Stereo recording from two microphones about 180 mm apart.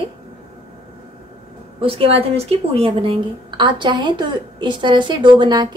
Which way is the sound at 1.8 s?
30° right (ahead or behind).